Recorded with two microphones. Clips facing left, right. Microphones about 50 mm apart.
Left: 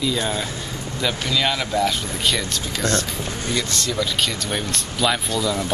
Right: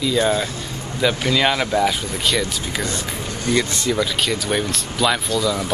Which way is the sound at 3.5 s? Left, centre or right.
Right.